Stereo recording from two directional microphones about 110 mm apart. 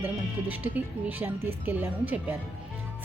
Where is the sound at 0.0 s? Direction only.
15° right (ahead or behind).